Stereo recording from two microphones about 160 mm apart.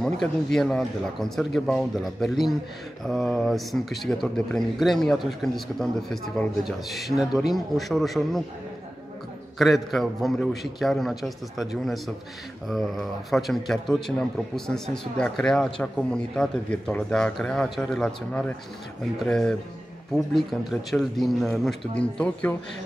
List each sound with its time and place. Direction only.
0.0 s a man's voice: 5° left (ahead or behind)
9.6 s a man's voice: centre (ahead or behind)